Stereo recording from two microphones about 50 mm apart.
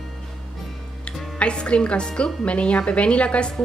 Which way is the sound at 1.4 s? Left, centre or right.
Left.